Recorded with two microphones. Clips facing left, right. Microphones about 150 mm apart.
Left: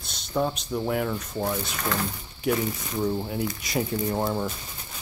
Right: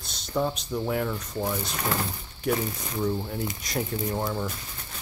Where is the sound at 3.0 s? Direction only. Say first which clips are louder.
Left 2 dB; 15° left (ahead or behind).